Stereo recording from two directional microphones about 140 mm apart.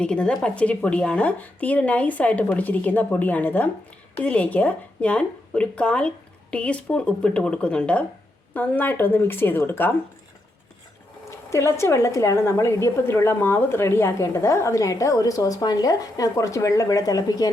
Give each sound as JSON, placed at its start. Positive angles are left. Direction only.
{"t": 0.0, "sound": "speech", "side_deg": 5}
{"t": 11.3, "sound": "a woman's voice", "side_deg": 20}